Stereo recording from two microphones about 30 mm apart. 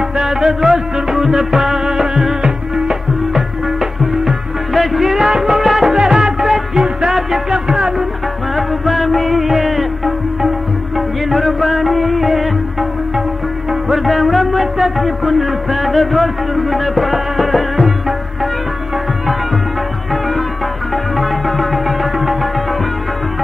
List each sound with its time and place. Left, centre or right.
0.2 s music: centre
5.9 s music: right
6.4 s music: centre
6.8 s music: right
8.5 s music: centre
13.7 s music: centre
20.9 s music: centre